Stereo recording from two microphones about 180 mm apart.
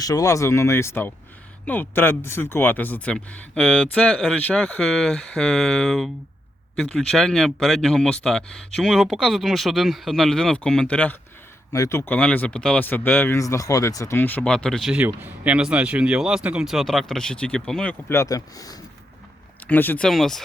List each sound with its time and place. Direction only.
0.0 s speech: 20° left (ahead or behind)
18.1 s speech: 15° left (ahead or behind)
19.6 s speech: 10° left (ahead or behind)